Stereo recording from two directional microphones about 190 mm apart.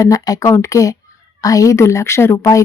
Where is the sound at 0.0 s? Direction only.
20° left (ahead or behind).